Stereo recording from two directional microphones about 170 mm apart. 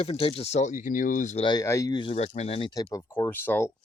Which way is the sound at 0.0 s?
35° left (ahead or behind).